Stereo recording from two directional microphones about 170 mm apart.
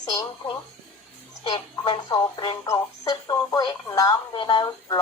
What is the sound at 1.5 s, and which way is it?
Speech, 25° left (ahead or behind).